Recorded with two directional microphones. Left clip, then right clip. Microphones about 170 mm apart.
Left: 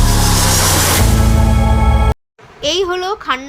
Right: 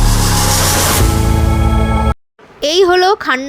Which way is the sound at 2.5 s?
35° right (ahead or behind).